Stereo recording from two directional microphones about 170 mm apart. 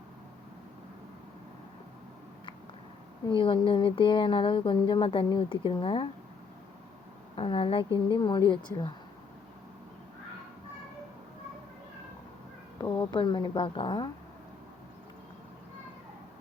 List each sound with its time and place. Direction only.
3.2 s speech: 30° left (ahead or behind)
7.3 s a woman's voice: 30° left (ahead or behind)
13.1 s speech: 25° left (ahead or behind)